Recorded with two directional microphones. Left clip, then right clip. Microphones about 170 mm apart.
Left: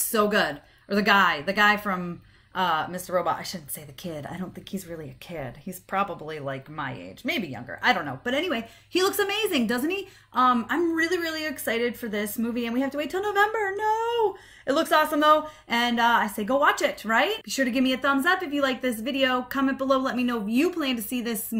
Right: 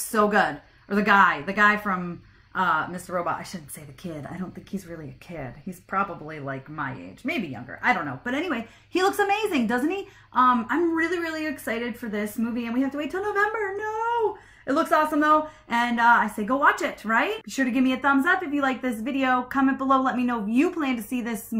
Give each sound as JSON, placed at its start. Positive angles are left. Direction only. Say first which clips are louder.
{"t": 0.1, "sound": "speech", "louder": "right 2 dB", "side_deg": 25}